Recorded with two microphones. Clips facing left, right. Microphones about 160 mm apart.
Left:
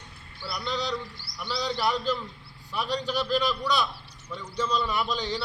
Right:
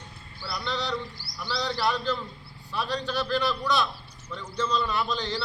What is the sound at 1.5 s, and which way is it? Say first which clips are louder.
A man's voice: even; 15° left (ahead or behind).